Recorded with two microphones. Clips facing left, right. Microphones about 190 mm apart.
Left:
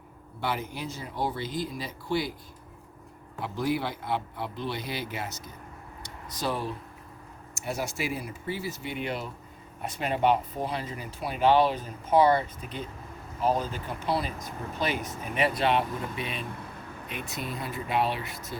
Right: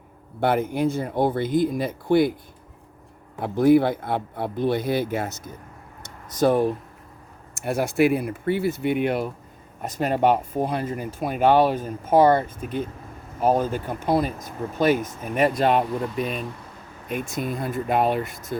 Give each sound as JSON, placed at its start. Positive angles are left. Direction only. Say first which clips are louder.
{"t": 0.3, "sound": "speech", "louder": "right 11 dB", "side_deg": -55}
{"t": 3.4, "sound": "speech", "louder": "right 12 dB", "side_deg": -55}
{"t": 9.8, "sound": "speech", "louder": "right 5 dB", "side_deg": -45}